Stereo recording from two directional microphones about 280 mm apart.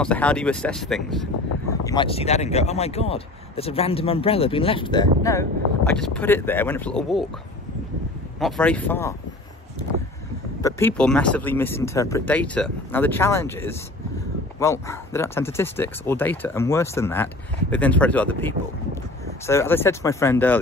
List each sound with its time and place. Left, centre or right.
0.0 s speech: centre
1.7 s speech: centre
8.4 s speech: centre
10.6 s speech: centre